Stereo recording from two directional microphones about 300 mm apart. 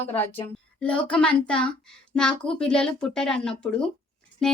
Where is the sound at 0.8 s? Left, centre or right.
Centre.